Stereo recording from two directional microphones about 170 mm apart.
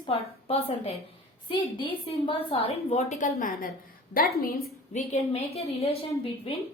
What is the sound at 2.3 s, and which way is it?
A woman's voice, 35° left (ahead or behind).